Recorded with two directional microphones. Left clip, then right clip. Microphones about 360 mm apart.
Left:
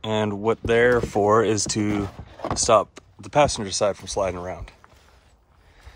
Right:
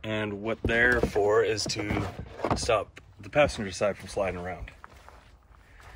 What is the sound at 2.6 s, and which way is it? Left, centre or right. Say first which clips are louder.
Speech: left 13 dB; centre.